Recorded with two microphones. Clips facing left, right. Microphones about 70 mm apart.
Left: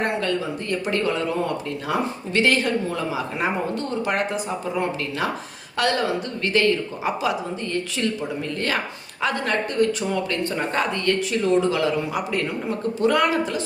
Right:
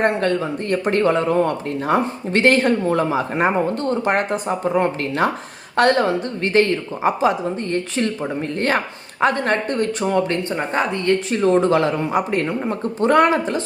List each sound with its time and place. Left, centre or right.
0.0 s speech: right
10.5 s speech: right
11.3 s speech: right